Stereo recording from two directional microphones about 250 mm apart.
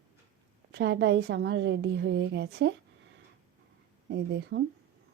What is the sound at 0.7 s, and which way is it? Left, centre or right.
A woman's voice, right.